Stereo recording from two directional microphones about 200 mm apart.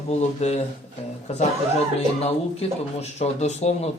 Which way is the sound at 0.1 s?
35° left (ahead or behind).